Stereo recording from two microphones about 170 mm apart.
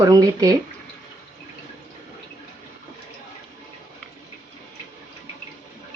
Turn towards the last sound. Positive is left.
turn(degrees=5)  # may be behind; listen again after turning